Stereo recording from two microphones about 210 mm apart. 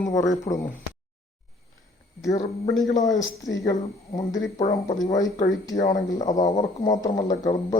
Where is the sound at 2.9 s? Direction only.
15° left (ahead or behind).